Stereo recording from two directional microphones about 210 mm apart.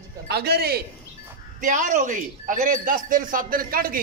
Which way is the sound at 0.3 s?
50° right (ahead or behind).